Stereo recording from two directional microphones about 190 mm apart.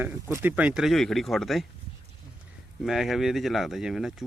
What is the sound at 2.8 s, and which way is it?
Speech, centre (ahead or behind).